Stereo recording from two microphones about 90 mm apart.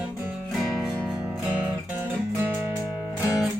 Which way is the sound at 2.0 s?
25° right (ahead or behind).